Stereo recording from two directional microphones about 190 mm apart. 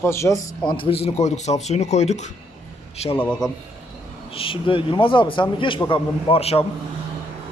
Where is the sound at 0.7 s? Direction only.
30° left (ahead or behind).